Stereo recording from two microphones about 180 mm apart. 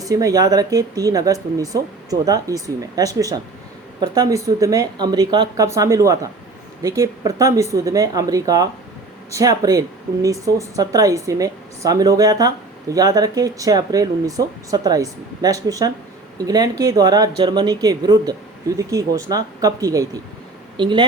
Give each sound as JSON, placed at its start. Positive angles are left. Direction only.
{"t": 0.0, "sound": "speech", "side_deg": -20}